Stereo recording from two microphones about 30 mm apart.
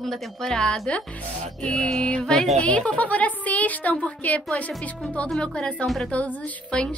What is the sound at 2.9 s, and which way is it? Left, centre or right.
Speech, left.